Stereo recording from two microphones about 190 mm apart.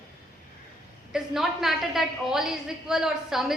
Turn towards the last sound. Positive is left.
turn(degrees=0)  # may be behind; listen again after turning